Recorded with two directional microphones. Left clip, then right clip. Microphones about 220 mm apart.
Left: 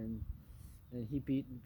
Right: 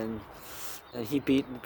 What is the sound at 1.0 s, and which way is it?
Speech, 25° right (ahead or behind).